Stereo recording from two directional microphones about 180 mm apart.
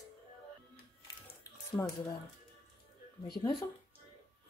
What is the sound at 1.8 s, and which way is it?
Speech, 10° left (ahead or behind).